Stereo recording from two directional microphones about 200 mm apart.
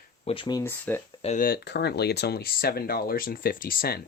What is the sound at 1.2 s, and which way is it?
Speech, 35° left (ahead or behind).